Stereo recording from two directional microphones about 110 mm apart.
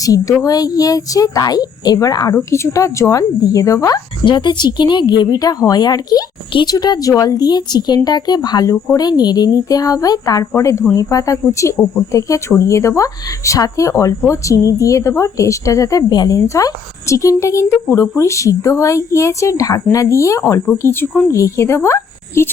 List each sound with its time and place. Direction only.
0.0 s speech: 30° left (ahead or behind)
2.3 s a woman's voice: 25° left (ahead or behind)
4.3 s a woman's voice: 45° left (ahead or behind); by 21.2 s 15° left (ahead or behind)
21.2 s a woman's voice: 30° left (ahead or behind)